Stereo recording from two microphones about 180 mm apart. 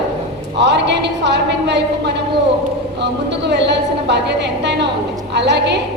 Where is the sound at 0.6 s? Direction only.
70° right (ahead or behind).